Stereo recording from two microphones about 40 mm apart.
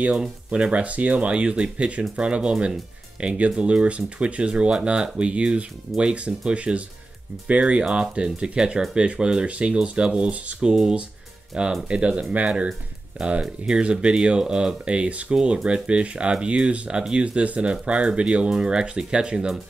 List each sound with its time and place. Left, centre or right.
0.1 s speech: right